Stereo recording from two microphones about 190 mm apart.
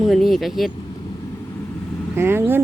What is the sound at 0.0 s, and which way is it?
Speech, centre (ahead or behind).